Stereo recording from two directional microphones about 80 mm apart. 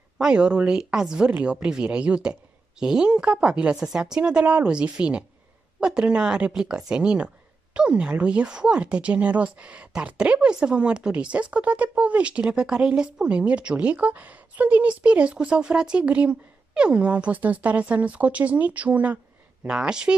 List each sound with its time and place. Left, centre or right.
0.2 s speech: centre